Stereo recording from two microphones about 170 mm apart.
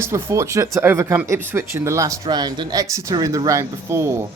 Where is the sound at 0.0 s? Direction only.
15° right (ahead or behind).